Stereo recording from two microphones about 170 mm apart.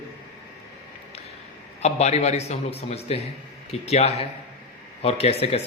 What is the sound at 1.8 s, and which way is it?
A man's voice, 40° left (ahead or behind).